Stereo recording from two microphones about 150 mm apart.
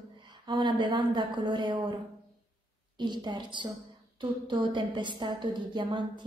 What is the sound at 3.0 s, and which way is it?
A woman's voice, 30° right (ahead or behind).